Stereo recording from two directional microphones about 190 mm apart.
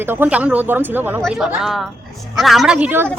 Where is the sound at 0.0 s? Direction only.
10° right (ahead or behind).